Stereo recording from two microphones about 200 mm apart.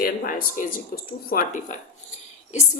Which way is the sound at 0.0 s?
45° left (ahead or behind).